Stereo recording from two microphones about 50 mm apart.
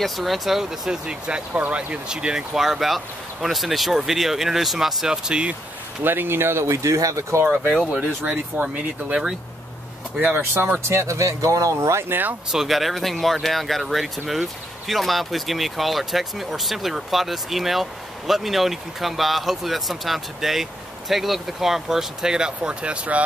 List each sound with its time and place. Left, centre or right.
0.0 s speech: centre
6.0 s speech: right
7.6 s speech: centre
8.2 s speech: right
10.2 s speech: right
10.8 s speech: right
12.1 s speech: right
12.4 s speech: centre; by 23.2 s right